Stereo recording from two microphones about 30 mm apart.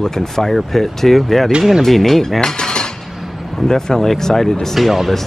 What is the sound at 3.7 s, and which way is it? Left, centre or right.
Speech, left.